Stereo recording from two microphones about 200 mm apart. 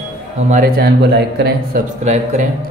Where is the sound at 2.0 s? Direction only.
35° right (ahead or behind).